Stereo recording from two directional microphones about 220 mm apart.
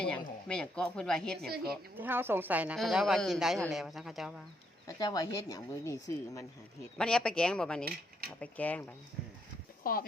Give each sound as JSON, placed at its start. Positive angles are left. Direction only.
{"t": 0.0, "sound": "speech", "side_deg": 5}
{"t": 1.7, "sound": "speech", "side_deg": -10}
{"t": 4.9, "sound": "speech", "side_deg": 15}
{"t": 7.0, "sound": "speech", "side_deg": 5}
{"t": 9.8, "sound": "speech", "side_deg": 40}